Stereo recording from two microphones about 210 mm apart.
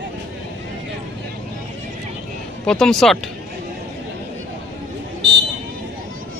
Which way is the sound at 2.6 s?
5° left (ahead or behind).